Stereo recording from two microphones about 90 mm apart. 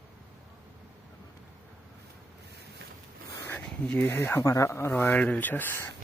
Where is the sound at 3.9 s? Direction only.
25° left (ahead or behind).